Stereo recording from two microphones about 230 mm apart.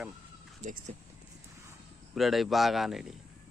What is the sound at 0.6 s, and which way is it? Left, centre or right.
Speech, right.